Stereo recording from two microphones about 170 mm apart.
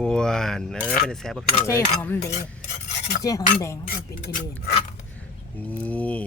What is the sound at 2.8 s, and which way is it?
Filing, 45° left (ahead or behind).